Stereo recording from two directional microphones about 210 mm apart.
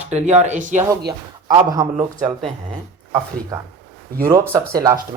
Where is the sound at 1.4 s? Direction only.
20° right (ahead or behind).